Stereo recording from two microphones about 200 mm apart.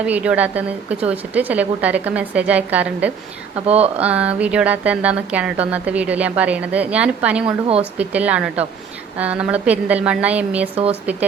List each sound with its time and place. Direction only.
0.0 s speech: 5° right (ahead or behind)
3.7 s a woman's voice: 30° right (ahead or behind)
4.0 s speech: 5° right (ahead or behind)
7.4 s a woman's voice: 30° right (ahead or behind)
7.9 s speech: 5° right (ahead or behind)